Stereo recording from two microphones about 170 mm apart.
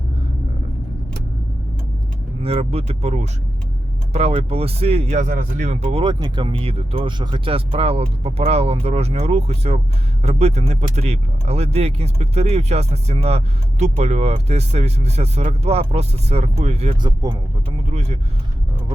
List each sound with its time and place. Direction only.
2.4 s speech: 35° right (ahead or behind)
17.0 s speech: 25° right (ahead or behind)
17.8 s speech: 40° right (ahead or behind)